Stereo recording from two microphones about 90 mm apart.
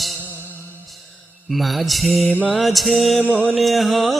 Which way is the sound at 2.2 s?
15° right (ahead or behind).